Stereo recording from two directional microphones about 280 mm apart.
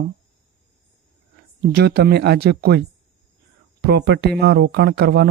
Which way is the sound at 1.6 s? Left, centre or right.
Right.